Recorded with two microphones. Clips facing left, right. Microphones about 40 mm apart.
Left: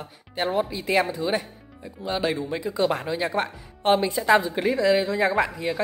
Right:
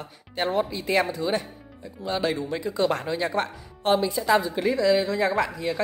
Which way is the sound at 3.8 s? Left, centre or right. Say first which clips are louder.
Left 1 dB; left.